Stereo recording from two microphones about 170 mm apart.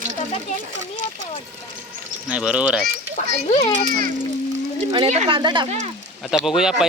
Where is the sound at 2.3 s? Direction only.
5° right (ahead or behind).